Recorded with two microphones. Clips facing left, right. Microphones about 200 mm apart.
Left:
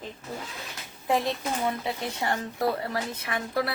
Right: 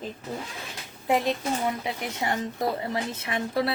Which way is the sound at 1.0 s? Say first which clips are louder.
Right 2 dB; 20° right (ahead or behind).